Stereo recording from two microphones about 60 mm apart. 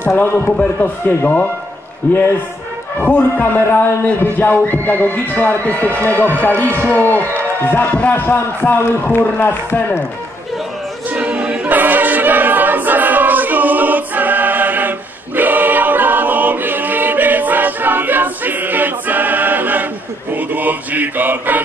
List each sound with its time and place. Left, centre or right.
0.5 s a man's voice: left
3.0 s a man's voice: left
11.1 s choir: right